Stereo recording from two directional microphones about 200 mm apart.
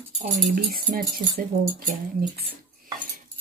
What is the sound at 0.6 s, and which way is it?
Speech, 50° right (ahead or behind).